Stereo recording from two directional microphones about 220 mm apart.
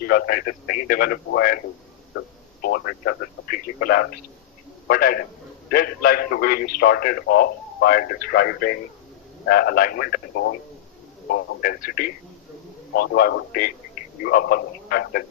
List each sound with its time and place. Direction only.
0.0 s a man's voice: 45° left (ahead or behind)